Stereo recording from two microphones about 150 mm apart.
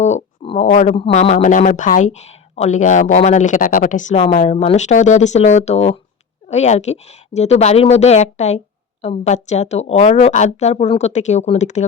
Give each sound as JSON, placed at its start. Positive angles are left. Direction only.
{"t": 0.0, "sound": "a sound", "side_deg": 45}
{"t": 0.7, "sound": "a woman's voice", "side_deg": 50}
{"t": 4.2, "sound": "a woman's voice", "side_deg": 45}